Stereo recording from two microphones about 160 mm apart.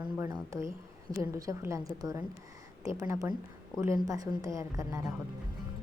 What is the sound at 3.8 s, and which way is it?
A woman's voice, 15° right (ahead or behind).